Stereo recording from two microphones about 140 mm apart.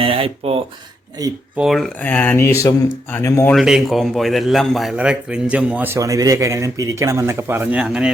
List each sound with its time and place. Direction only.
0.0 s a sound: 40° right (ahead or behind)
1.5 s a man's voice: centre (ahead or behind)
2.0 s speech: 10° left (ahead or behind)
3.5 s a man's voice: centre (ahead or behind)
6.0 s speech: 25° right (ahead or behind); by 8.1 s 5° right (ahead or behind)